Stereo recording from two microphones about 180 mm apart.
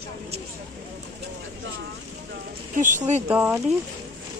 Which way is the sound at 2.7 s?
45° right (ahead or behind).